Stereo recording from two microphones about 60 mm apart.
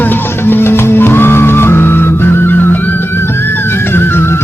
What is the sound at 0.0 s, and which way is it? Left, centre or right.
Music, left.